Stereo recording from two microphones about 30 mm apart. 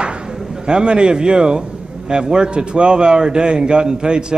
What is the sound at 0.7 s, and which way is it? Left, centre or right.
A man's voice, right.